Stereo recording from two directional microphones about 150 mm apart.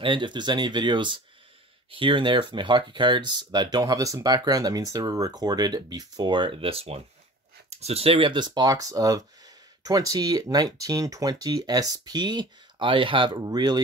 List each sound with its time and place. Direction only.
0.0 s speech: 30° right (ahead or behind)